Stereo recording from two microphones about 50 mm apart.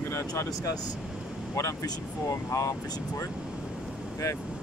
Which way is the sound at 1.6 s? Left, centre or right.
Left.